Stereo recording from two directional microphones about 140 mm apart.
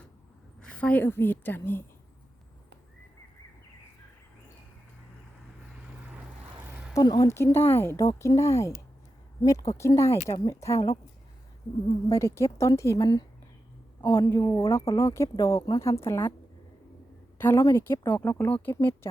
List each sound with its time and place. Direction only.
0.6 s a woman's voice: 10° left (ahead or behind)
6.9 s speech: 25° left (ahead or behind)
12.1 s speech: 20° left (ahead or behind)
17.3 s speech: 15° left (ahead or behind)